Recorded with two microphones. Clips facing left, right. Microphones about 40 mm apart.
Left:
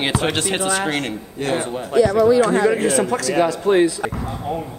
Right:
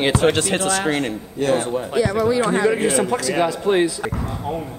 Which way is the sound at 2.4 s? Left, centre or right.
Right.